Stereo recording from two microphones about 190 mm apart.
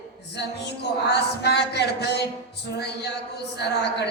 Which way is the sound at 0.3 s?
60° left (ahead or behind).